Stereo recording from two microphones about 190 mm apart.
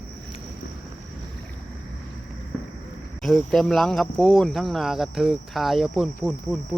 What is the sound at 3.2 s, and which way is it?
Speech, centre (ahead or behind).